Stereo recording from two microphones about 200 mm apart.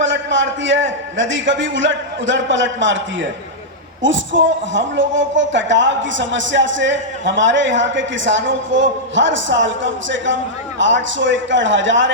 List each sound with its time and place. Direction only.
0.0 s a man's voice: 70° right (ahead or behind)